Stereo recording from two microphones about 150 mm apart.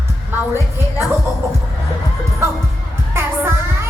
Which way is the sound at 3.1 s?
15° right (ahead or behind).